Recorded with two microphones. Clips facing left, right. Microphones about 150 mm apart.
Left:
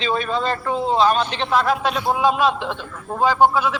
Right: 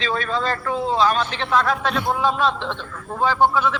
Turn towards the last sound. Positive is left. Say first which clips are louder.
# left 2 dB
turn(degrees=15)  # may be behind; listen again after turning